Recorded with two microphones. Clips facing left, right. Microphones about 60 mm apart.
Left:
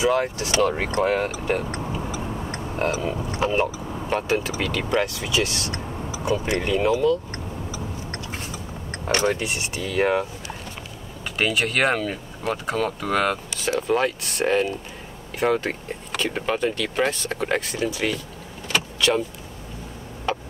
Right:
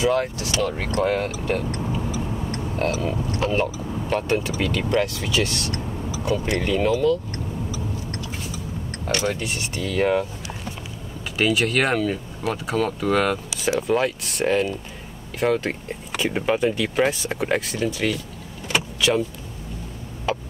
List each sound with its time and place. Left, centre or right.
0.0 s speech: centre
1.8 s a sound: centre
2.4 s tick: centre
3.1 s speech: centre
7.7 s vehicle: left
8.3 s a sound: left
9.0 s speech: left
9.4 s speech: centre
11.3 s speech: centre
18.7 s vehicle: centre
20.3 s a sound: centre